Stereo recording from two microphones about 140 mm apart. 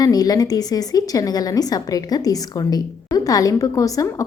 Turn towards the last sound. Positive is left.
turn(degrees=25)  # may be behind; listen again after turning